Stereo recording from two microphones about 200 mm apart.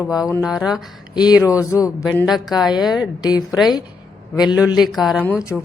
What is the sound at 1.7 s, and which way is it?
Speech, 15° left (ahead or behind).